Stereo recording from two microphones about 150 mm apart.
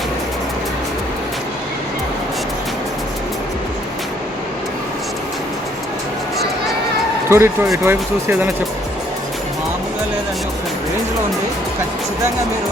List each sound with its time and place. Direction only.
7.3 s speech: 15° right (ahead or behind)